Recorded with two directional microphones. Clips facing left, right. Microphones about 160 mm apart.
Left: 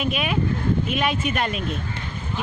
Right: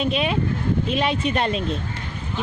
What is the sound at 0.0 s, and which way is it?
Speech, 30° right (ahead or behind).